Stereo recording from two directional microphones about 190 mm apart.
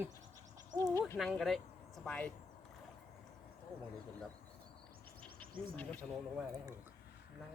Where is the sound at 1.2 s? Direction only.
Centre (ahead or behind).